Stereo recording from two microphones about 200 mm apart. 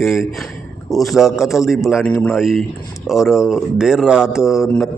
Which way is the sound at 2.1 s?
10° left (ahead or behind).